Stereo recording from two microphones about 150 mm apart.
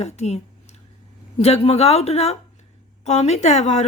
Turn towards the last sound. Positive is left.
turn(degrees=50)  # may be behind; listen again after turning